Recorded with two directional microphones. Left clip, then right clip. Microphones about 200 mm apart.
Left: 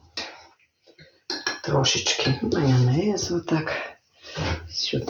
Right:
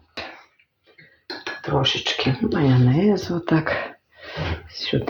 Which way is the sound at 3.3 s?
45° right (ahead or behind).